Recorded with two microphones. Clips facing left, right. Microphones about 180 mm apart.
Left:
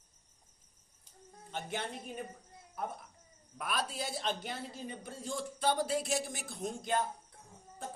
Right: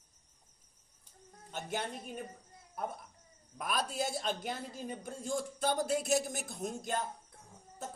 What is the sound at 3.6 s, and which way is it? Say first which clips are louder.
A man's voice: right 2 dB; 45° right (ahead or behind).